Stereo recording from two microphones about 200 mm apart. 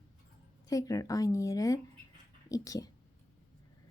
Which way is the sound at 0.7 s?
15° left (ahead or behind).